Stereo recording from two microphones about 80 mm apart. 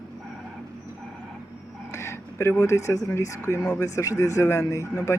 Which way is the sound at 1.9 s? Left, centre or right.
Left.